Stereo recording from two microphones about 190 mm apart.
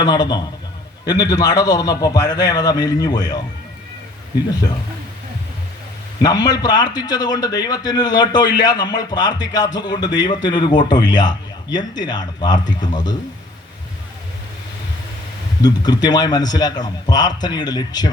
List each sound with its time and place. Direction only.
0.0 s a man's voice: 20° left (ahead or behind)
6.2 s a man's voice: 20° left (ahead or behind)
15.6 s a man's voice: 20° left (ahead or behind)